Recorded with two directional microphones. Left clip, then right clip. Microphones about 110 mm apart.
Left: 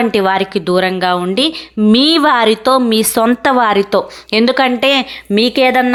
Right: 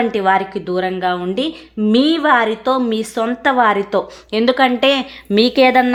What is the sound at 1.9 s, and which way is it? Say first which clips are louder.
A woman's voice: left 3 dB; 50° left (ahead or behind).